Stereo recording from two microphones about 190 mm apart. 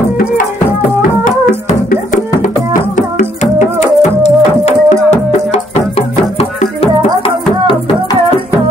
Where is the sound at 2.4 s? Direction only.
45° left (ahead or behind); by 7.9 s 30° left (ahead or behind).